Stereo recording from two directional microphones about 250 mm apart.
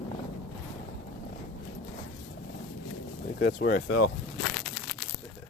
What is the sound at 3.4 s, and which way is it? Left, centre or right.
Speech, left.